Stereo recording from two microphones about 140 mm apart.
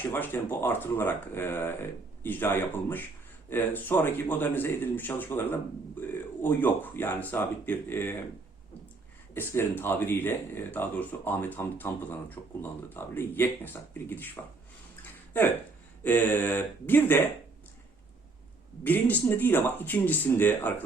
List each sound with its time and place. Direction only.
0.0 s speech: 15° left (ahead or behind)
9.3 s speech: 15° left (ahead or behind)
15.0 s a sound: 15° left (ahead or behind)
16.0 s speech: 15° left (ahead or behind)
18.8 s speech: 15° left (ahead or behind)